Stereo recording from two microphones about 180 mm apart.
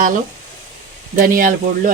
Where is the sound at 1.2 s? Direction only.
50° right (ahead or behind).